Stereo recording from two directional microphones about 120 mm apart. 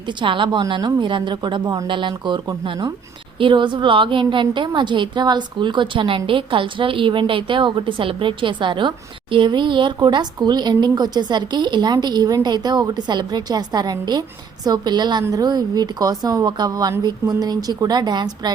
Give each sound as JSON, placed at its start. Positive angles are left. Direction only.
{"t": 0.2, "sound": "a woman's voice", "side_deg": -40}